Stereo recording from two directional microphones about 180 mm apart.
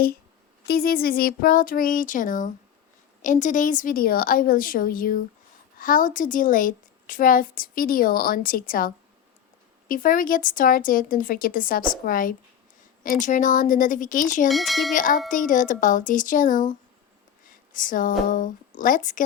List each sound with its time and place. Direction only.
0.7 s a woman's voice: 55° left (ahead or behind)
9.9 s a woman's voice: 50° left (ahead or behind)
14.4 s speech: centre (ahead or behind)
14.9 s a woman's voice: 45° left (ahead or behind)